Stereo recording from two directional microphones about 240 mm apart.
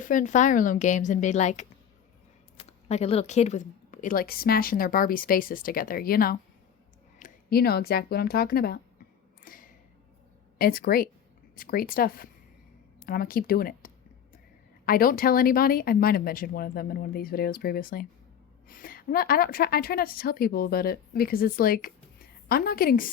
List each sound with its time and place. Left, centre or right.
0.0 s a woman's voice: left
9.4 s a sound: left
10.6 s a woman's voice: left